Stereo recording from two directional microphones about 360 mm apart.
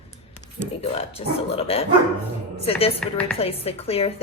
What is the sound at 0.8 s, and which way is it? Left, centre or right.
A woman's voice, centre.